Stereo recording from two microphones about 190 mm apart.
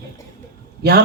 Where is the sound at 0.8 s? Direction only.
55° right (ahead or behind).